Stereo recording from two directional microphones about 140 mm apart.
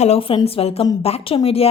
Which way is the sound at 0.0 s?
45° left (ahead or behind).